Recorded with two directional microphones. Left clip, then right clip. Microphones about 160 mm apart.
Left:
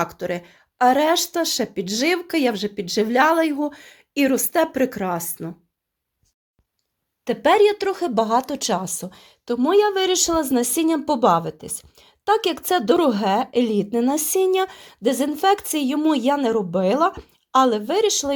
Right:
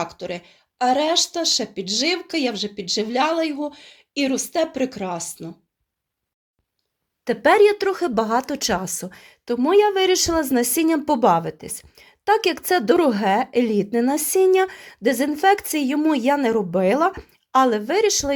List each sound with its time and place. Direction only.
0.0 s speech: 20° left (ahead or behind)
7.3 s speech: 5° right (ahead or behind)